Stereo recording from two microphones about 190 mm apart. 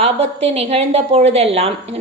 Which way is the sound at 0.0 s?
30° right (ahead or behind).